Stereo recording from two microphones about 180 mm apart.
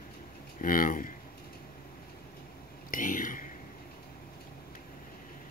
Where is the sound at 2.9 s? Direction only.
50° left (ahead or behind).